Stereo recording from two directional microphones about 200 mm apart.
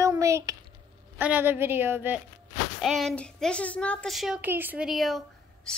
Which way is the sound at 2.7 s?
Centre (ahead or behind).